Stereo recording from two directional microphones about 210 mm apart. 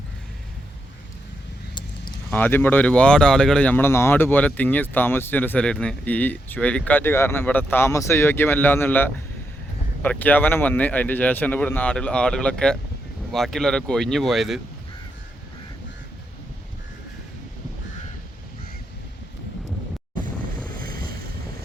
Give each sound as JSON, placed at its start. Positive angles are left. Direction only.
{"t": 2.3, "sound": "speech", "side_deg": 10}
{"t": 20.7, "sound": "boat", "side_deg": -45}